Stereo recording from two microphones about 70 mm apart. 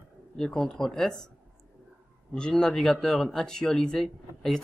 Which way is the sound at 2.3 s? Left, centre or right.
Centre.